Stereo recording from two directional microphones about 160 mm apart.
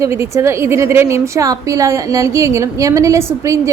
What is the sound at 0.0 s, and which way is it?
A woman's voice, 15° right (ahead or behind).